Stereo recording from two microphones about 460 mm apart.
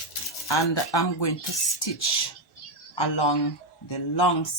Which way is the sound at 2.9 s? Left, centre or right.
Left.